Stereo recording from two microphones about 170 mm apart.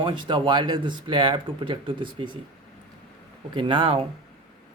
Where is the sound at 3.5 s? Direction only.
30° right (ahead or behind).